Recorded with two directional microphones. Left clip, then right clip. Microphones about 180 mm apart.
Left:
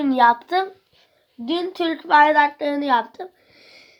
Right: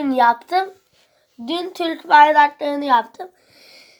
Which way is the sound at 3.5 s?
Centre (ahead or behind).